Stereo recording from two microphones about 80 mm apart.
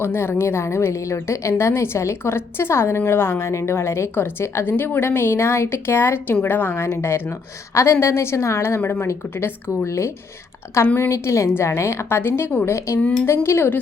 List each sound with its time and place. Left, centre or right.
0.0 s a woman's voice: left
13.0 s speech: centre
13.2 s a woman's voice: left